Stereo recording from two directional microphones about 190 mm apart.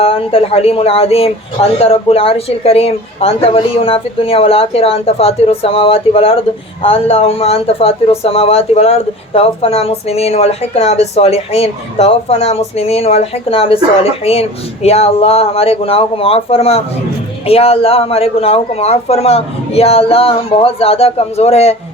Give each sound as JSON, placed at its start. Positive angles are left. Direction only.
{"t": 0.0, "sound": "speech", "side_deg": 30}